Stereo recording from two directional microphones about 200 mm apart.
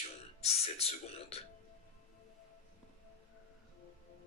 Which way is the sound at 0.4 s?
30° left (ahead or behind).